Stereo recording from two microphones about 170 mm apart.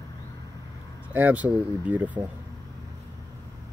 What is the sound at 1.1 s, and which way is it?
Speech, 10° right (ahead or behind).